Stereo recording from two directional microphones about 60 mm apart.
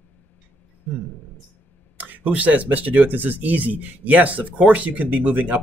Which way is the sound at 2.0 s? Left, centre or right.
Right.